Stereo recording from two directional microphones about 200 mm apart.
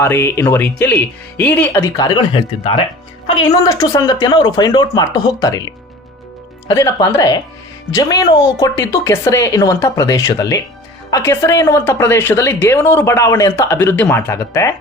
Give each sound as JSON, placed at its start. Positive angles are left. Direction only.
{"t": 0.0, "sound": "a woman's voice", "side_deg": 15}
{"t": 2.0, "sound": "a woman's voice", "side_deg": 20}